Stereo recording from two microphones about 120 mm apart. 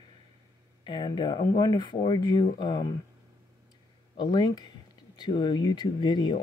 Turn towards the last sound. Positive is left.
turn(degrees=40)  # may be behind; listen again after turning